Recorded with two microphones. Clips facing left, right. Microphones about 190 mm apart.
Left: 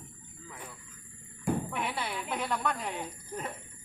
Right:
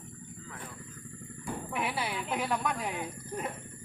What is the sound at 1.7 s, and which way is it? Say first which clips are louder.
Speech: right 1 dB; 5° right (ahead or behind).